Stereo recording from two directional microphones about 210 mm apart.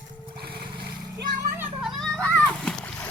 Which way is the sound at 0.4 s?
50° right (ahead or behind).